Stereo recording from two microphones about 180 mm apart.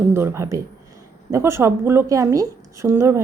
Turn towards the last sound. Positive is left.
turn(degrees=-15)  # may be behind; listen again after turning